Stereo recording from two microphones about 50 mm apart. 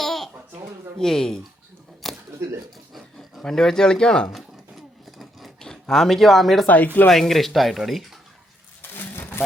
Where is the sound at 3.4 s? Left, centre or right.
Centre.